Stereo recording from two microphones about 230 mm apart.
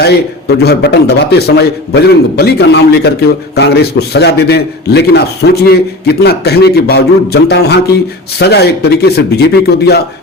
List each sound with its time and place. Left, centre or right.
0.0 s a man's voice: left